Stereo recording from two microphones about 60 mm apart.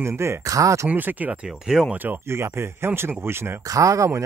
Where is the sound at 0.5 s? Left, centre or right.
Right.